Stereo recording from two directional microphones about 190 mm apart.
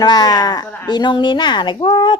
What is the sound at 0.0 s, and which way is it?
Speech, 20° left (ahead or behind).